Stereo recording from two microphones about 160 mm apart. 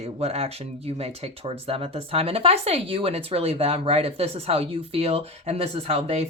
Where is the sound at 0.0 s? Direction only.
40° right (ahead or behind).